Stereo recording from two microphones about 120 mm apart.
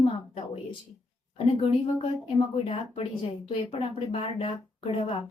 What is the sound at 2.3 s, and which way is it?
Speech, 60° left (ahead or behind).